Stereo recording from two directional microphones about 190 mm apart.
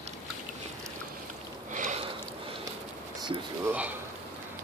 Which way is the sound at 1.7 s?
40° right (ahead or behind).